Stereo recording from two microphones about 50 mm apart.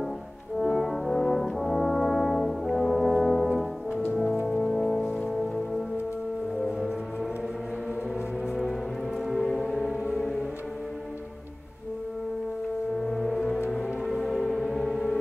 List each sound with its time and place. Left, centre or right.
0.6 s brass instrument: centre
4.5 s music: centre
9.3 s music: centre
9.9 s music: right
13.0 s gong: centre
13.7 s music: centre